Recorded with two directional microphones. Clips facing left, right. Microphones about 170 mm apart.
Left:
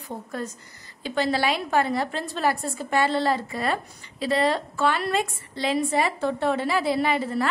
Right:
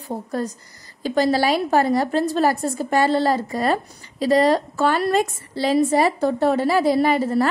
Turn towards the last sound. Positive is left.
turn(degrees=-40)  # may be behind; listen again after turning